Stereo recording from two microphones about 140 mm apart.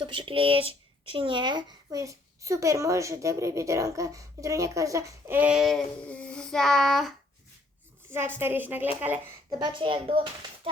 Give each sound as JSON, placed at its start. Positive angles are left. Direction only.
{"t": 0.0, "sound": "speech", "side_deg": -35}
{"t": 5.4, "sound": "child singing", "side_deg": -5}
{"t": 8.4, "sound": "a woman's voice", "side_deg": -15}
{"t": 9.5, "sound": "a child's voice", "side_deg": -30}